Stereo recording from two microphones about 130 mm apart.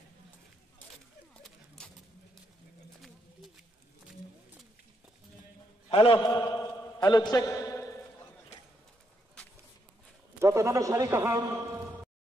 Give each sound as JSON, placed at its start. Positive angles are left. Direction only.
{"t": 1.3, "sound": "a sound", "side_deg": 5}
{"t": 5.9, "sound": "a man's voice", "side_deg": 45}
{"t": 10.4, "sound": "a man's voice", "side_deg": -20}